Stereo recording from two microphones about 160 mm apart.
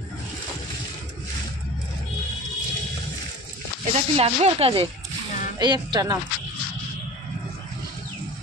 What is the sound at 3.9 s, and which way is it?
Speech, 40° right (ahead or behind).